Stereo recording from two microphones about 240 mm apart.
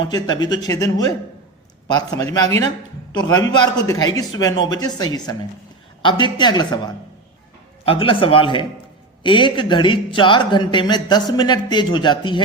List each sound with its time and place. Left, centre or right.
0.0 s speech: centre